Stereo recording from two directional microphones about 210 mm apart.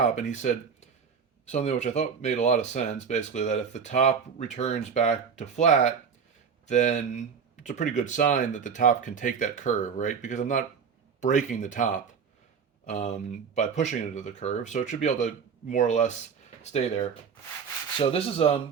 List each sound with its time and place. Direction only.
0.0 s speech: 35° left (ahead or behind)